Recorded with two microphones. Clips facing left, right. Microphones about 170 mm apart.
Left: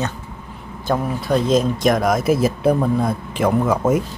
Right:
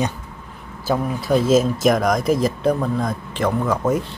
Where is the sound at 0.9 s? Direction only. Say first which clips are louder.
Even; centre (ahead or behind).